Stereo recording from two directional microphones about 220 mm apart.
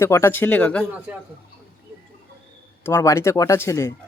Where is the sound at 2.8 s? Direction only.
15° left (ahead or behind).